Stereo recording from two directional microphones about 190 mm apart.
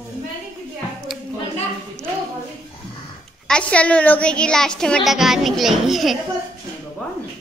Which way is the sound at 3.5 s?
5° left (ahead or behind).